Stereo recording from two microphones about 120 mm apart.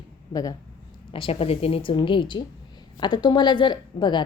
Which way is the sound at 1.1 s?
50° left (ahead or behind).